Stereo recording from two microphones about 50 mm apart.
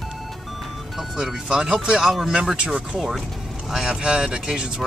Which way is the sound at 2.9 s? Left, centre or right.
Centre.